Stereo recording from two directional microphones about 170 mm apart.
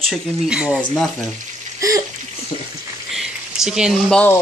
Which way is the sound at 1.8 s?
20° right (ahead or behind).